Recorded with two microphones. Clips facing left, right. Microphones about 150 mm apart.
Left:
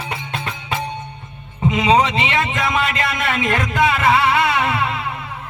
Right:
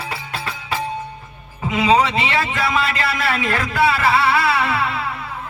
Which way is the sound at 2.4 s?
30° right (ahead or behind).